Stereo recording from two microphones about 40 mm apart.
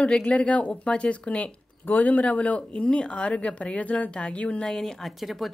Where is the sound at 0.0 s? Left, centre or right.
Left.